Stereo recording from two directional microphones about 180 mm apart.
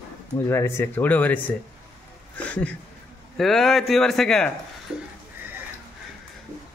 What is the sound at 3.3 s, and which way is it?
Speech, centre (ahead or behind).